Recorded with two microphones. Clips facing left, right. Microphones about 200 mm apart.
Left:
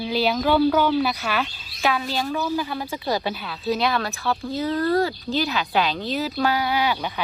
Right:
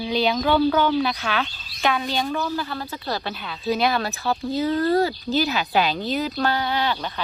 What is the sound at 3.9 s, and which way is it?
Speech, 25° right (ahead or behind).